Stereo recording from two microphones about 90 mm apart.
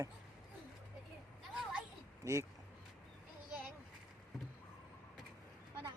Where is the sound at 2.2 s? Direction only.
35° right (ahead or behind).